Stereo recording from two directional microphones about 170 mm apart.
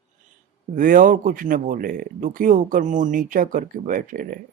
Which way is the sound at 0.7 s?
55° right (ahead or behind).